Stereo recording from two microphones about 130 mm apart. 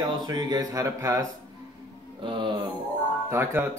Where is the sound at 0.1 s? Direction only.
30° right (ahead or behind).